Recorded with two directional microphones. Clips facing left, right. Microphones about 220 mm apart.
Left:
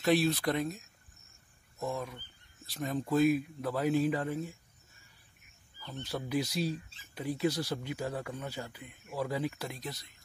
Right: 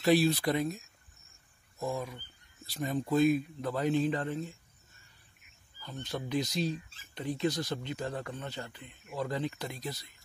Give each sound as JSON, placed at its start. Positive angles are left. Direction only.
{"t": 0.0, "sound": "a man's voice", "side_deg": 0}
{"t": 6.0, "sound": "speech", "side_deg": 10}